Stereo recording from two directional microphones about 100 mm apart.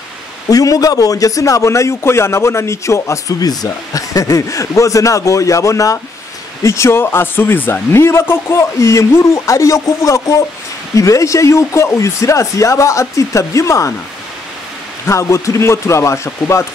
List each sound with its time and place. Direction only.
0.5 s a man's voice: 35° left (ahead or behind)
15.0 s speech: 30° left (ahead or behind)